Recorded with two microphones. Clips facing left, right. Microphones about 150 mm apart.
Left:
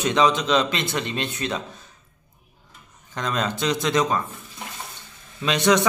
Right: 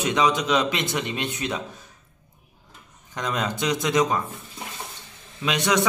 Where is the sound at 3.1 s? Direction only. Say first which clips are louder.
Left 1 dB; 15° right (ahead or behind).